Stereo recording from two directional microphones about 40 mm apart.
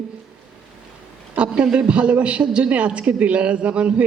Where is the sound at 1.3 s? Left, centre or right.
Right.